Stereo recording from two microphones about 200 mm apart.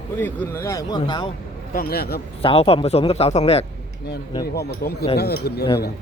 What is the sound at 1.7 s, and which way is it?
Speech, 50° left (ahead or behind).